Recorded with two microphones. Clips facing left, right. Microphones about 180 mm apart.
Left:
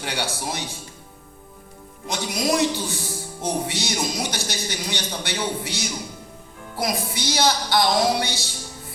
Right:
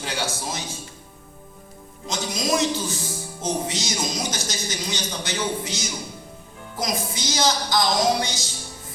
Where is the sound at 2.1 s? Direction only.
60° left (ahead or behind).